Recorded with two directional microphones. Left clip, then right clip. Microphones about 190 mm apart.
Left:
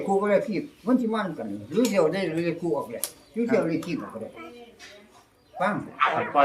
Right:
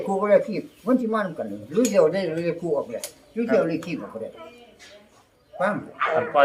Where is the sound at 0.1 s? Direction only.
15° right (ahead or behind).